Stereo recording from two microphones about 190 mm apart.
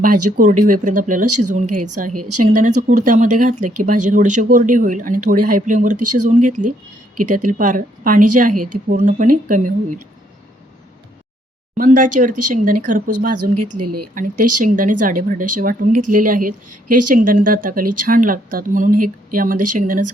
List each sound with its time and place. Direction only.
0.0 s speech: 45° right (ahead or behind)
11.8 s speech: 45° right (ahead or behind)